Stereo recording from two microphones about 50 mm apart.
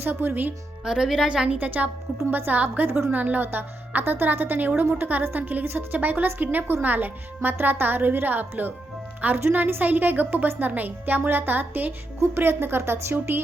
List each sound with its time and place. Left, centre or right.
0.0 s speech: right
0.9 s speech: centre
1.3 s a woman's voice: right
1.5 s speech: right
5.6 s a woman's voice: right
6.0 s speech: right